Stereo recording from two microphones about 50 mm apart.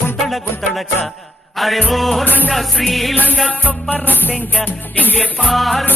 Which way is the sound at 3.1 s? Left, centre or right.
Left.